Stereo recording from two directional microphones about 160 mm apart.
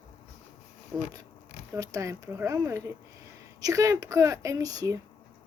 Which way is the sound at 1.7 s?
20° right (ahead or behind).